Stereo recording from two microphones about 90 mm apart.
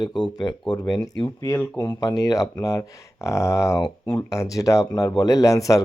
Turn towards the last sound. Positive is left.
turn(degrees=40)  # may be behind; listen again after turning